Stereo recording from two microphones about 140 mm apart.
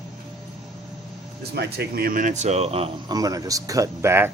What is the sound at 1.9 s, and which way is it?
Speech, 85° right.